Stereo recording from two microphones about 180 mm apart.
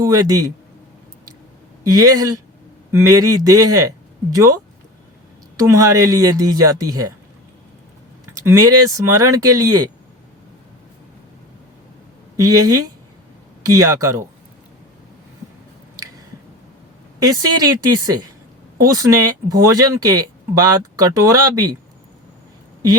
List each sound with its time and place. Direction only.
0.0 s speech: 20° right (ahead or behind)
1.8 s speech: 20° right (ahead or behind)
5.5 s speech: 20° right (ahead or behind)
8.3 s speech: 15° right (ahead or behind)
12.4 s speech: 20° right (ahead or behind)
17.2 s speech: 20° right (ahead or behind)